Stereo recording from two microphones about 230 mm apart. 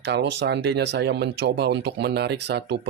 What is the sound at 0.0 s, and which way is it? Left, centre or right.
Speech, right.